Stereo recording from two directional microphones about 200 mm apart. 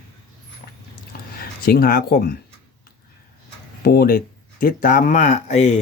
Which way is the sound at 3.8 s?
50° left (ahead or behind).